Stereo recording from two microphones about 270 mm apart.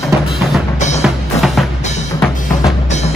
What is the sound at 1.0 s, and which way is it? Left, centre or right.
Drum, centre.